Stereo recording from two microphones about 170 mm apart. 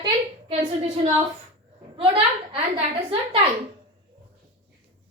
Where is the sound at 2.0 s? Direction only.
35° right (ahead or behind).